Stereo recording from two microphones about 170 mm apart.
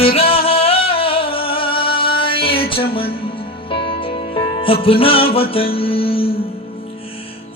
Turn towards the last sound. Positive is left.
turn(degrees=35)  # may be behind; listen again after turning